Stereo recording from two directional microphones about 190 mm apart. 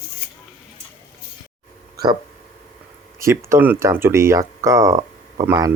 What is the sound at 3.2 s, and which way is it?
Speech, 10° right (ahead or behind).